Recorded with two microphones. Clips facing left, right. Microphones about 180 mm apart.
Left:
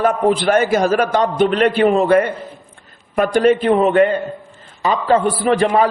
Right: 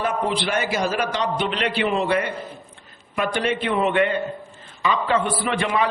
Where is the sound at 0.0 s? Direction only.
50° left (ahead or behind).